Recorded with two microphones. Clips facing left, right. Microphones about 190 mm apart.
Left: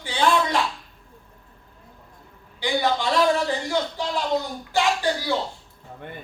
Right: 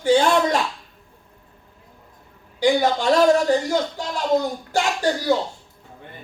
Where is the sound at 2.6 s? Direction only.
45° right (ahead or behind).